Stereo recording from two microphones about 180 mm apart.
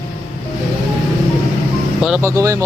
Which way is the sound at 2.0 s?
5° right (ahead or behind).